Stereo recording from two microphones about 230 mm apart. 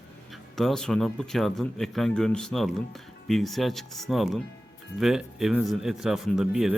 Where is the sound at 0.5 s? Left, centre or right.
Centre.